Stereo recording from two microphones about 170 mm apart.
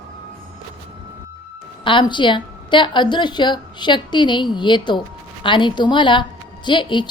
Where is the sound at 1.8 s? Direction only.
30° left (ahead or behind).